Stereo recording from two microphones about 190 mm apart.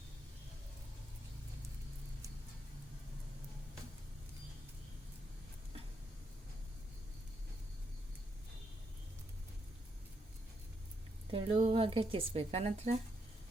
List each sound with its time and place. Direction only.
11.3 s speech: 35° right (ahead or behind)